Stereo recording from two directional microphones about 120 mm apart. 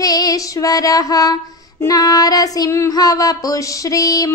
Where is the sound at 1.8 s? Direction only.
30° left (ahead or behind).